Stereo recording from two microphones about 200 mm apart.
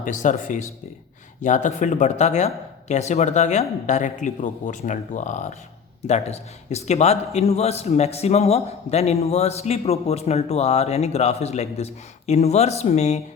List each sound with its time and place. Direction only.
0.0 s a man's voice: 40° left (ahead or behind)